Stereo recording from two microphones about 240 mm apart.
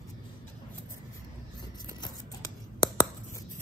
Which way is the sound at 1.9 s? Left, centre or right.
Centre.